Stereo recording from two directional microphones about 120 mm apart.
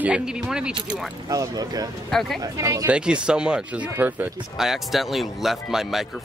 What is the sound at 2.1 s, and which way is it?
Speech, 5° left (ahead or behind).